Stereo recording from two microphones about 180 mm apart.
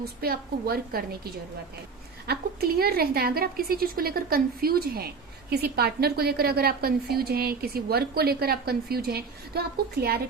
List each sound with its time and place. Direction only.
0.0 s a woman's voice: 60° right (ahead or behind)